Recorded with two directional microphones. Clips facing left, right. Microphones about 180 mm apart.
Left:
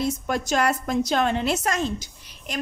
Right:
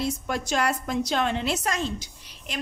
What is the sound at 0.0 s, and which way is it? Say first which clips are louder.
A woman's voice: left 3 dB; 45° left (ahead or behind).